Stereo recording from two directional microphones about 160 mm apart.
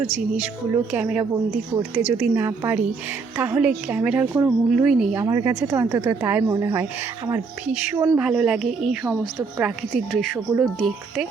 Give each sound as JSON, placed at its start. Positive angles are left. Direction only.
{"t": 0.1, "sound": "a woman's voice", "side_deg": -10}
{"t": 5.2, "sound": "a woman's voice", "side_deg": -20}
{"t": 8.2, "sound": "speech", "side_deg": -5}